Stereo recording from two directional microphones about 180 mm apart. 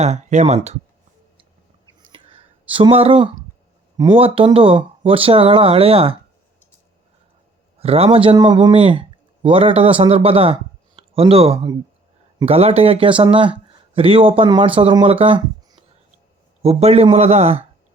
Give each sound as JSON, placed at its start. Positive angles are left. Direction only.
{"t": 0.0, "sound": "speech", "side_deg": -40}
{"t": 2.0, "sound": "a sound", "side_deg": -30}
{"t": 3.9, "sound": "speech", "side_deg": -25}
{"t": 7.8, "sound": "speech", "side_deg": -35}